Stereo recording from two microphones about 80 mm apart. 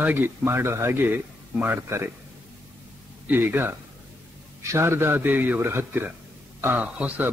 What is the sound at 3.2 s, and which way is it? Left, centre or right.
Speech, right.